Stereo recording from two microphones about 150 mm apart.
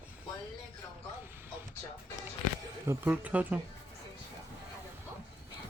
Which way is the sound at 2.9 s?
10° right (ahead or behind).